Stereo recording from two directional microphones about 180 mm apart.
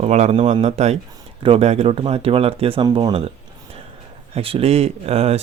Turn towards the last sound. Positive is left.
turn(degrees=-35)  # may be behind; listen again after turning